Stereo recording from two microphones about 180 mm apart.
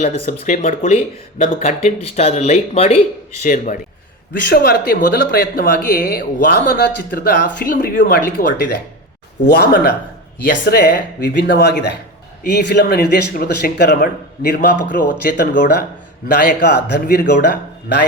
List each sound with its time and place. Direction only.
0.3 s speech: 40° left (ahead or behind)
3.4 s speech: 45° left (ahead or behind)
4.4 s speech: 55° left (ahead or behind)
9.4 s speech: 65° left (ahead or behind); by 17.6 s 50° left (ahead or behind)